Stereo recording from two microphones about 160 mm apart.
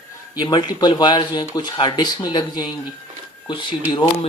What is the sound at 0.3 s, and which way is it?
Speech, 25° left (ahead or behind).